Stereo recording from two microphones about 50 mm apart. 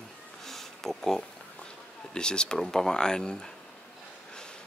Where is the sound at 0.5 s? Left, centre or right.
Centre.